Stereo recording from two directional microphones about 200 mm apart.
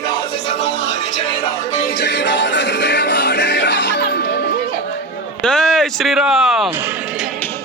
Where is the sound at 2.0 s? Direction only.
60° left (ahead or behind).